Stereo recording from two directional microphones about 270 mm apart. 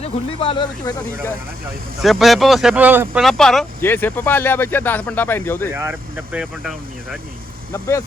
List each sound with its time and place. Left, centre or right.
0.0 s speech: centre
2.0 s speech: centre
5.7 s speech: centre
7.7 s speech: centre